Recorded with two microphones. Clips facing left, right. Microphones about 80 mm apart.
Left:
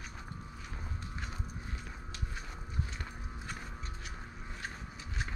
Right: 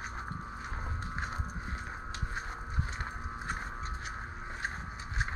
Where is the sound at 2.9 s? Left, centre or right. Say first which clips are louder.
Right 6 dB; right.